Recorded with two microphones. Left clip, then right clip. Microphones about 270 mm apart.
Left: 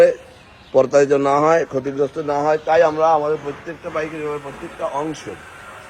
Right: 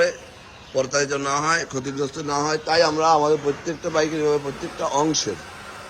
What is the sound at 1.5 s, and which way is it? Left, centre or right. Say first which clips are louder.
A man's voice: left 6 dB; centre.